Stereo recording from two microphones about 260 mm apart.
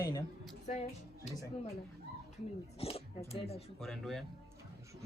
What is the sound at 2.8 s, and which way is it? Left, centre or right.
Speech, left.